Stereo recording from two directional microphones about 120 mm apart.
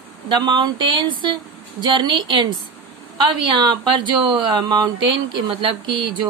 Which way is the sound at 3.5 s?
40° right (ahead or behind).